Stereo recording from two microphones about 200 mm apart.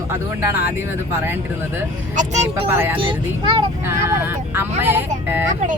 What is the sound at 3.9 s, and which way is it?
Speech, 10° right (ahead or behind).